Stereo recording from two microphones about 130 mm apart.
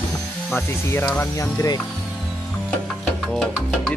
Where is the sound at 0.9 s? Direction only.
20° left (ahead or behind).